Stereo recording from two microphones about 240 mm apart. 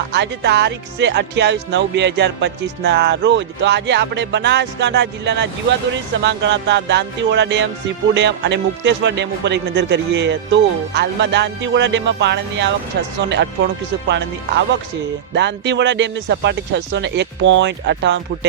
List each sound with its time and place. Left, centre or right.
0.1 s music: right
14.1 s music: right